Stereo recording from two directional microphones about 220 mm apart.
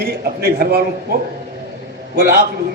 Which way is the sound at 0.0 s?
45° right (ahead or behind).